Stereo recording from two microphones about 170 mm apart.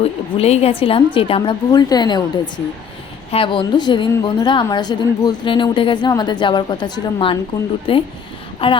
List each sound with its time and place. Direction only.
0.0 s a woman's voice: 35° left (ahead or behind)
3.3 s a woman's voice: 30° left (ahead or behind)